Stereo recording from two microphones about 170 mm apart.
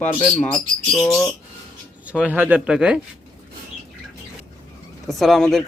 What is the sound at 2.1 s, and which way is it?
Speech, 10° right (ahead or behind).